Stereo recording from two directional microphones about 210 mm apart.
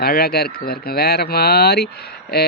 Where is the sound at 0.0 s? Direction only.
45° left (ahead or behind).